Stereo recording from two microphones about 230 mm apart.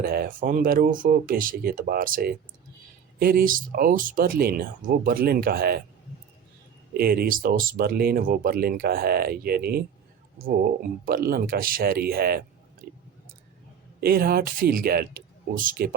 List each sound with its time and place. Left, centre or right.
0.0 s speech: right
6.9 s speech: right
14.0 s speech: right